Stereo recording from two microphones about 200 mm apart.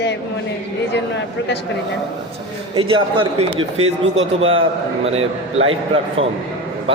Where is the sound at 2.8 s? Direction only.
25° right (ahead or behind).